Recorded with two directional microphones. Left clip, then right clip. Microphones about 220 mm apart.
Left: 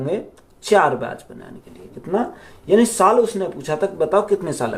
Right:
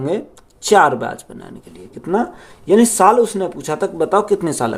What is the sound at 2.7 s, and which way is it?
Speech, 50° right (ahead or behind).